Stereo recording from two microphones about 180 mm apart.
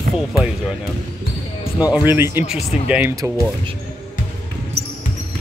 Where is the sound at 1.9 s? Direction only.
10° right (ahead or behind).